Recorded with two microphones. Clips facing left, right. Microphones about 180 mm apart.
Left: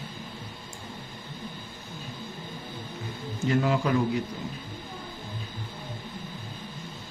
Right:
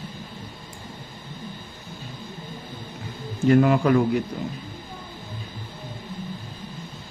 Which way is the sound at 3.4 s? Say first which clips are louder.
Right 8 dB; 55° right (ahead or behind).